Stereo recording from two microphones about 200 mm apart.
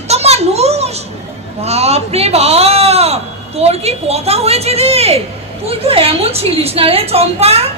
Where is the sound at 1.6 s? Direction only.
30° right (ahead or behind).